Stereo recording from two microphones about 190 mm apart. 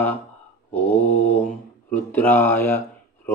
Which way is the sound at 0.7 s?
10° left (ahead or behind).